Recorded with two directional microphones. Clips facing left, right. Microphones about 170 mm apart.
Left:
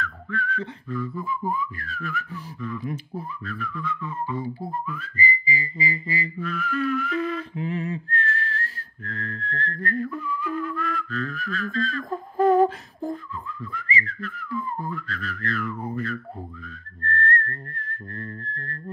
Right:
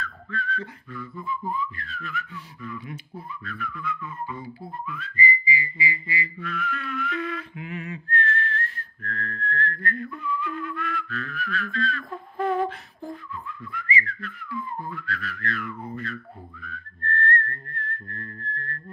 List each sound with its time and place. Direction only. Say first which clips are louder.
0.0 s whistling: left 3 dB; 15° left (ahead or behind)
0.8 s whistling: left 8 dB; 35° left (ahead or behind)
4.6 s whistling: left 4 dB; 40° left (ahead or behind)